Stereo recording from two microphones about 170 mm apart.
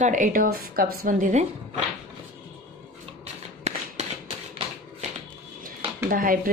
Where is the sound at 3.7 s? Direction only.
40° right (ahead or behind).